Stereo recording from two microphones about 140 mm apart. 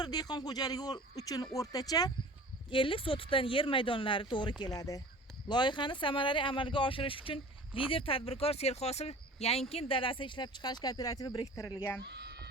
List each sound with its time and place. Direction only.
0.0 s speech: 30° left (ahead or behind)